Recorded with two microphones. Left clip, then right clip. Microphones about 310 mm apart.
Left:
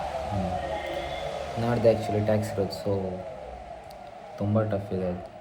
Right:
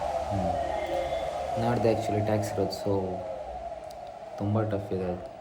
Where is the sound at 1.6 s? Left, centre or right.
Centre.